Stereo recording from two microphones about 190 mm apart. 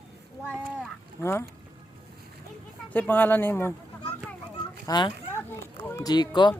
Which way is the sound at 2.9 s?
10° left (ahead or behind).